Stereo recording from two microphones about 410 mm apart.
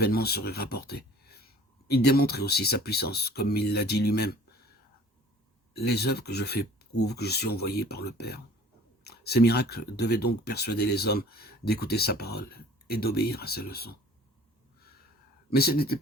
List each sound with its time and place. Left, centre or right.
0.0 s speech: left
5.7 s speech: left
15.4 s speech: left